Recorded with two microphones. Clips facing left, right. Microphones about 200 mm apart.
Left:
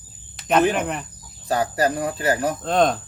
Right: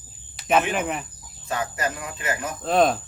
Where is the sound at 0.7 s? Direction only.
5° right (ahead or behind).